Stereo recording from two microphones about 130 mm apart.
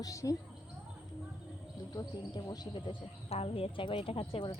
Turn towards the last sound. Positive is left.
turn(degrees=40)  # may be behind; listen again after turning